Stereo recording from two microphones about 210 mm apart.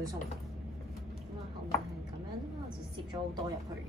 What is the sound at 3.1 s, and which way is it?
Speech, 25° right (ahead or behind).